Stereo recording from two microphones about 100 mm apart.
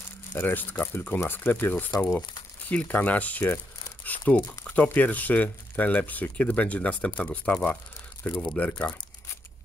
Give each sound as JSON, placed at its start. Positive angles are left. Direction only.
{"t": 0.4, "sound": "speech", "side_deg": 20}